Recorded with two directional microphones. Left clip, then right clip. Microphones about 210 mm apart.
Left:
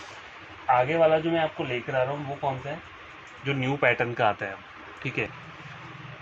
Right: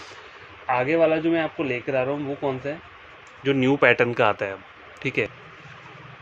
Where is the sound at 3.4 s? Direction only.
60° right (ahead or behind); by 5.3 s 30° right (ahead or behind).